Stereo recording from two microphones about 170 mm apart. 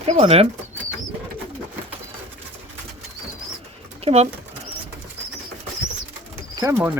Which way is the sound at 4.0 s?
40° right (ahead or behind).